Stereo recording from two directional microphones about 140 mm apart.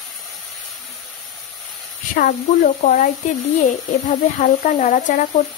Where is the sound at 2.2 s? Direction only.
55° left (ahead or behind).